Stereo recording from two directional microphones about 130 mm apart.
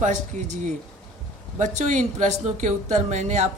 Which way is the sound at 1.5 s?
70° right (ahead or behind).